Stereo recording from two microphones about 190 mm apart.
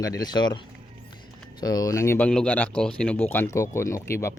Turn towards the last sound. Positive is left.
turn(degrees=15)  # may be behind; listen again after turning